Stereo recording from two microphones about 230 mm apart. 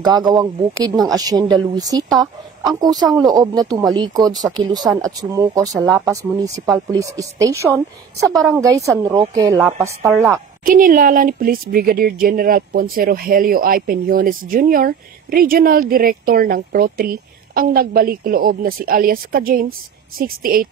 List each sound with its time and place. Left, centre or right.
0.0 s speech: centre
8.3 s a woman's voice: centre
8.5 s speech: centre
10.6 s speech: right